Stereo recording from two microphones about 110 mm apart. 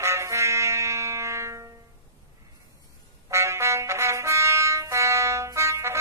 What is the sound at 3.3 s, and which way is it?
Music, 25° right (ahead or behind).